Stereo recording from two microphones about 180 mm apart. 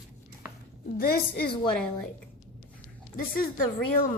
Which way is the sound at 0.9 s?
60° left (ahead or behind).